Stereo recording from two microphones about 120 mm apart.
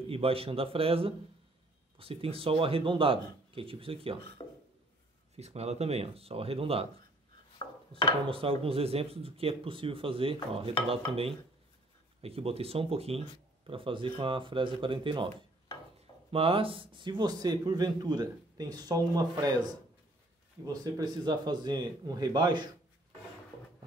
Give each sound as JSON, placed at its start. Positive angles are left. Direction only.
{"t": 0.0, "sound": "speech", "side_deg": -50}
{"t": 4.4, "sound": "a sound", "side_deg": 35}
{"t": 5.3, "sound": "speech", "side_deg": -60}
{"t": 7.6, "sound": "a sound", "side_deg": 40}
{"t": 8.3, "sound": "speech", "side_deg": -50}
{"t": 12.2, "sound": "a man's voice", "side_deg": -55}